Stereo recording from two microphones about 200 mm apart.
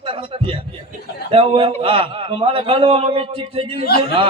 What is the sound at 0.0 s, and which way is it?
A man's voice, 25° right (ahead or behind).